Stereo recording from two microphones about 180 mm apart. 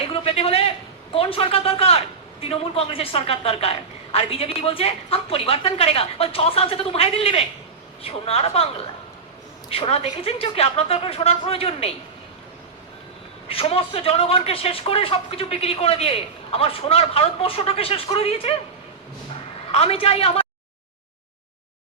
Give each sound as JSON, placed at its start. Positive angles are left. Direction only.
{"t": 0.0, "sound": "a sound", "side_deg": 30}
{"t": 1.1, "sound": "a man's voice", "side_deg": 30}
{"t": 9.6, "sound": "a man's voice", "side_deg": 30}
{"t": 13.5, "sound": "a man's voice", "side_deg": 35}
{"t": 19.7, "sound": "a man's voice", "side_deg": 35}